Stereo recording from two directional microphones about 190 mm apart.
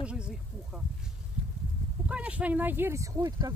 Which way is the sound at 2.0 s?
5° right (ahead or behind).